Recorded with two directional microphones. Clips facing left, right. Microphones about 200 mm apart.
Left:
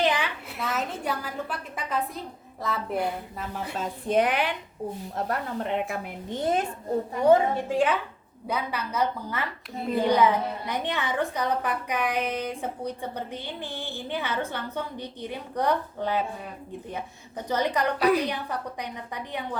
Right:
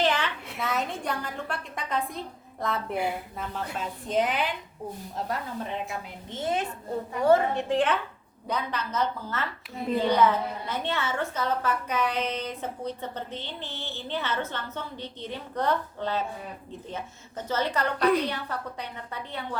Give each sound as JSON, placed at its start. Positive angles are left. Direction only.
{"t": 0.0, "sound": "a sound", "side_deg": 15}
{"t": 0.5, "sound": "a woman's voice", "side_deg": 0}
{"t": 3.5, "sound": "a woman's voice", "side_deg": 10}
{"t": 4.1, "sound": "a woman's voice", "side_deg": 65}
{"t": 7.3, "sound": "a woman's voice", "side_deg": 10}